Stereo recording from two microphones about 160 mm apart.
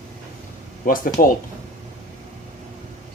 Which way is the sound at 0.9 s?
60° left (ahead or behind).